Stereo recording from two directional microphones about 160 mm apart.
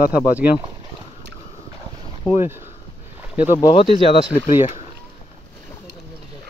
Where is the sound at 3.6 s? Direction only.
30° left (ahead or behind).